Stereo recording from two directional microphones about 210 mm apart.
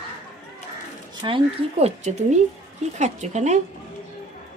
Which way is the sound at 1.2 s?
25° right (ahead or behind).